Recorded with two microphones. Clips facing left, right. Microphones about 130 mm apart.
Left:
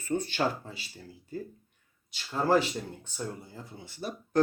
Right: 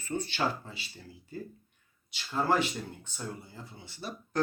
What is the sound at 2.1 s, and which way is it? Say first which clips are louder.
Speech: left 3 dB; 35° left (ahead or behind).